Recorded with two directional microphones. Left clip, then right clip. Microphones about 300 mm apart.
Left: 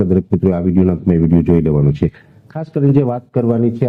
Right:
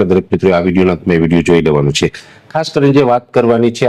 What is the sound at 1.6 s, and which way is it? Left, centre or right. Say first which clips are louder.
Speech: right 6 dB; centre.